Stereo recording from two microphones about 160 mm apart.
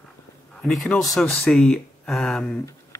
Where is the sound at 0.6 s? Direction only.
Centre (ahead or behind).